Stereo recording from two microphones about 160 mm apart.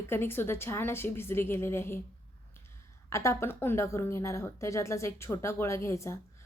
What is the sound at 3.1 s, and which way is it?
A woman's voice, 20° left (ahead or behind).